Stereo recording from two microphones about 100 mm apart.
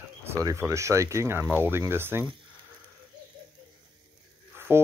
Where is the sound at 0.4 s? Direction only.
35° right (ahead or behind).